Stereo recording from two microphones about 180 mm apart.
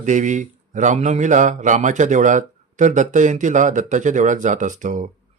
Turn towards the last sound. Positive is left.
turn(degrees=-45)  # may be behind; listen again after turning